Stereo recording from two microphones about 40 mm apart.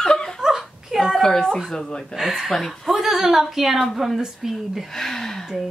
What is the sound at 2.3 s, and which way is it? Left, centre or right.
A woman's voice, centre.